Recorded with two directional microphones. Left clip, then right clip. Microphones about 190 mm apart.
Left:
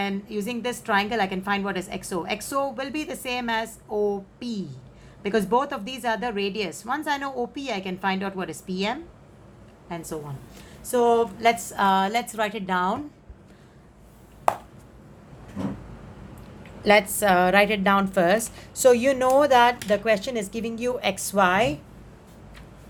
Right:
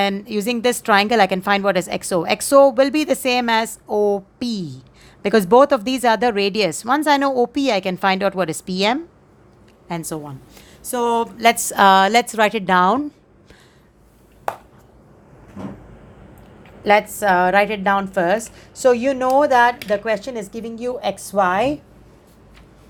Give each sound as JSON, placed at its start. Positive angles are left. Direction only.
{"t": 0.0, "sound": "a woman's voice", "side_deg": -50}
{"t": 16.8, "sound": "a woman's voice", "side_deg": -5}